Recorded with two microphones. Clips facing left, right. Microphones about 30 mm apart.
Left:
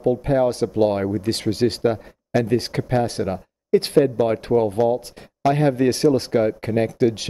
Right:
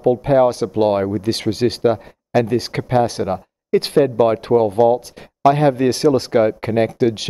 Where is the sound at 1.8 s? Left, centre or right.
Right.